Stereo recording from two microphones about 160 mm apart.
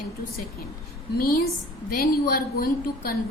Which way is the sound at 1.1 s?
70° left (ahead or behind).